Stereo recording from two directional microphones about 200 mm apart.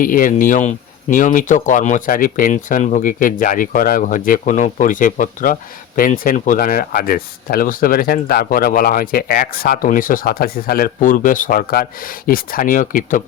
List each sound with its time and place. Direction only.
0.0 s speech: 45° left (ahead or behind)